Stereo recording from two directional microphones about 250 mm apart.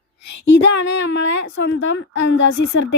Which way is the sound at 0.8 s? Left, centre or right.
Left.